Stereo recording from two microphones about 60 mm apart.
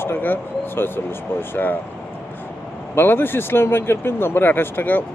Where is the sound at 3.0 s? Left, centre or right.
Left.